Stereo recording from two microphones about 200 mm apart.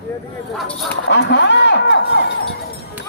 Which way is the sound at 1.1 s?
60° left (ahead or behind).